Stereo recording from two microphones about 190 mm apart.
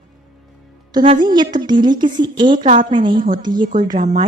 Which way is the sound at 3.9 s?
40° right (ahead or behind).